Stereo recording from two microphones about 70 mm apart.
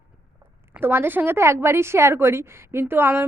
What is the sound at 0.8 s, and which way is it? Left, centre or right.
A woman's voice, right.